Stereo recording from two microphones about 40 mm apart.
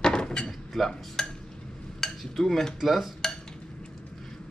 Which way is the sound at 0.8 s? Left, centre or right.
Centre.